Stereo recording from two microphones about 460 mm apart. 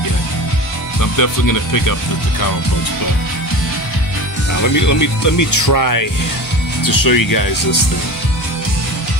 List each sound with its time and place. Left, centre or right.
1.0 s speech: left
4.7 s speech: left